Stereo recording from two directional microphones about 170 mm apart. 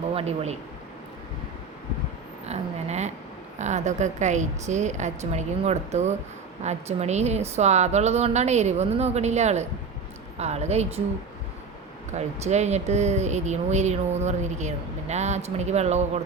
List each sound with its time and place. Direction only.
0.1 s speech: 35° right (ahead or behind)
2.5 s a woman's voice: 40° right (ahead or behind)
12.1 s speech: 40° right (ahead or behind)